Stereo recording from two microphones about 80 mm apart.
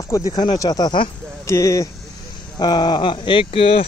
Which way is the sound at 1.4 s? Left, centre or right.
Left.